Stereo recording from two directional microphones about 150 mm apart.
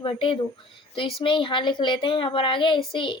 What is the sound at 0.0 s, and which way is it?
Speech, 35° left (ahead or behind).